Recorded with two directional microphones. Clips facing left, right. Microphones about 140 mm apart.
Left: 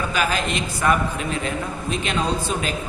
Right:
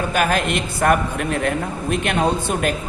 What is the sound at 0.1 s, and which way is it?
A man's voice, 55° right (ahead or behind).